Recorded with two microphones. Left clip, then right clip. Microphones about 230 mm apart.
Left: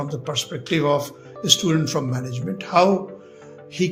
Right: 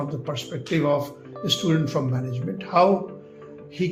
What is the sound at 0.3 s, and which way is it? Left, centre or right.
A man's voice, left.